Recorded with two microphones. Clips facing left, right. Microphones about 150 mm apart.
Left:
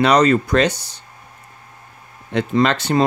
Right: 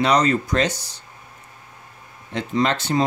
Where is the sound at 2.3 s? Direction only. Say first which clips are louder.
Left 4 dB; 75° left (ahead or behind).